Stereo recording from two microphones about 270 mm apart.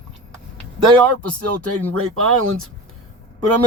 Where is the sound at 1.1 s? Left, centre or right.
Right.